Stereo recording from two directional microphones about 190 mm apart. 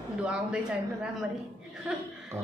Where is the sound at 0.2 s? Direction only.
5° right (ahead or behind).